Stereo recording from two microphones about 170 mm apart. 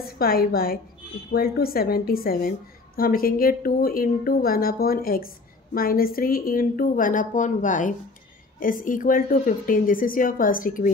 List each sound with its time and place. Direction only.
0.0 s a woman's voice: 60° left (ahead or behind)